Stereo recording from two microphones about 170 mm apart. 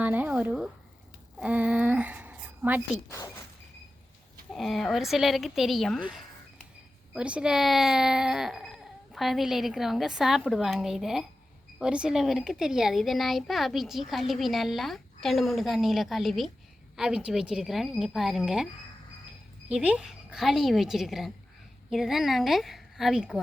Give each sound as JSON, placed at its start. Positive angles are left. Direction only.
{"t": 0.0, "sound": "a sound", "side_deg": -10}
{"t": 3.1, "sound": "speech", "side_deg": 20}
{"t": 4.5, "sound": "a child's voice", "side_deg": 0}